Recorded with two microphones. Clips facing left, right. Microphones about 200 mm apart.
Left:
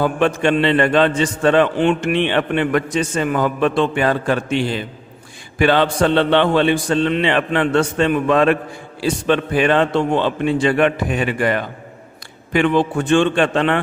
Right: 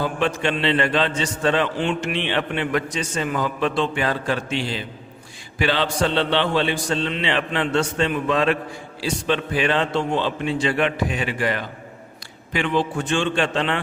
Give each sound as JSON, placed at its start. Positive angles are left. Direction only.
{"t": 0.0, "sound": "a man's voice", "side_deg": 55}